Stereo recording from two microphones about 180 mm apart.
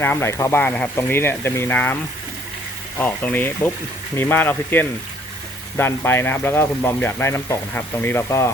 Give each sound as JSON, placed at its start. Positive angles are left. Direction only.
{"t": 0.0, "sound": "speech", "side_deg": 15}
{"t": 3.0, "sound": "speech", "side_deg": 10}